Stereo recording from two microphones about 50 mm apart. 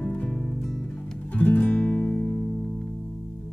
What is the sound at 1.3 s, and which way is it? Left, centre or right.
Music, left.